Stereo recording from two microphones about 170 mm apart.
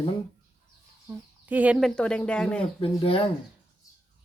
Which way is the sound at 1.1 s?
10° right (ahead or behind).